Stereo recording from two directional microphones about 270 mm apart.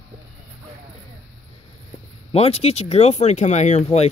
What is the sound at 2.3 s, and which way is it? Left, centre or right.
Speech, left.